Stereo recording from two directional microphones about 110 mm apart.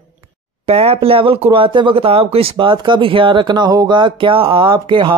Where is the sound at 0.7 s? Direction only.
65° right (ahead or behind).